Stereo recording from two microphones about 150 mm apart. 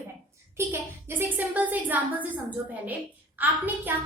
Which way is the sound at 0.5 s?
15° right (ahead or behind).